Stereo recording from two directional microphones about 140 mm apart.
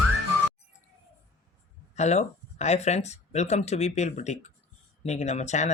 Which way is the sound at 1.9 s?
55° left (ahead or behind).